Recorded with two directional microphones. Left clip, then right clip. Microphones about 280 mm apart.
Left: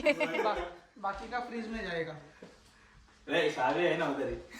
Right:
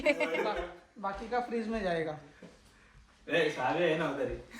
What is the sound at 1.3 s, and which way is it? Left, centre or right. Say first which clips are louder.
Speech: right 4 dB; centre.